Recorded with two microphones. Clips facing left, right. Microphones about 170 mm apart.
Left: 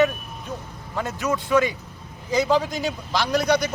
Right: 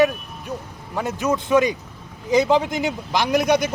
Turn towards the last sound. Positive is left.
turn(degrees=-20)  # may be behind; listen again after turning